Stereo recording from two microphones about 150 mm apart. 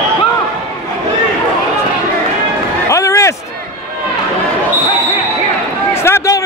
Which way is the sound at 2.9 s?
20° left (ahead or behind).